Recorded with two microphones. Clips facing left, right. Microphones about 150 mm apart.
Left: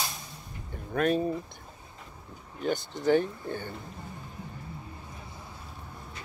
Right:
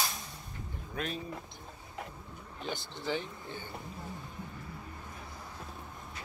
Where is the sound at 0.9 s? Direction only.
55° left (ahead or behind).